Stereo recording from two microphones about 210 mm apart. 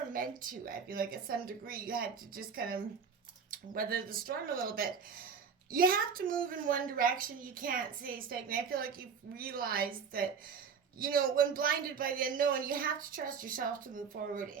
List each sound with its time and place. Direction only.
0.1 s a woman's voice: 40° right (ahead or behind)